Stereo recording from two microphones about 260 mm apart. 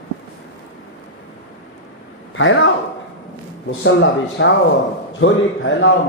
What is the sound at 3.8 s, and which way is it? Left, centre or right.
Speech, left.